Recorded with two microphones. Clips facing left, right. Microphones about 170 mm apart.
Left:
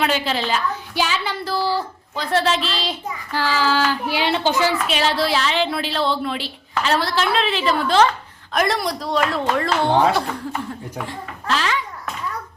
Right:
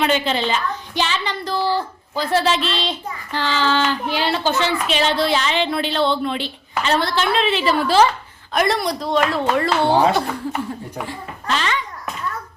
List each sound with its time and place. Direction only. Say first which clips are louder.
0.0 s a woman's voice: right 2 dB; 5° left (ahead or behind)